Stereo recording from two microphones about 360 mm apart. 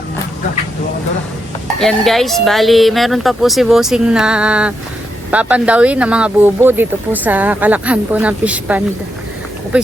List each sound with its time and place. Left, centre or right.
1.8 s speech: centre